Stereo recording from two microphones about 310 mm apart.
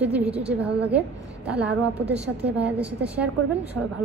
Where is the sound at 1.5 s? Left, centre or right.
Centre.